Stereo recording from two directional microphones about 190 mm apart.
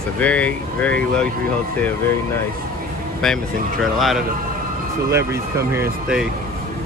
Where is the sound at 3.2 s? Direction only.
Centre (ahead or behind).